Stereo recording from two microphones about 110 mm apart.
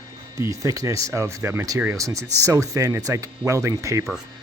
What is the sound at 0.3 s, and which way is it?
Speech, 30° right (ahead or behind).